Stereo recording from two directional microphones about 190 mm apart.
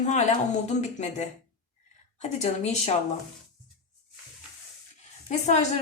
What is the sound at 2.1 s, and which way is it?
Speech, 35° left (ahead or behind).